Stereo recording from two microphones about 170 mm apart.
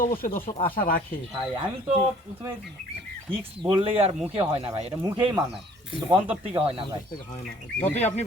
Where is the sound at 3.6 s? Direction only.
35° right (ahead or behind).